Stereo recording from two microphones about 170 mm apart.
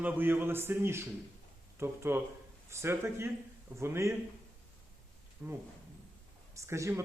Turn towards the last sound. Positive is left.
turn(degrees=-15)  # may be behind; listen again after turning